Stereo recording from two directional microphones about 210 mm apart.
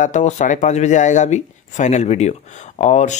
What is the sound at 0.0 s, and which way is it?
A man's voice, 35° left (ahead or behind).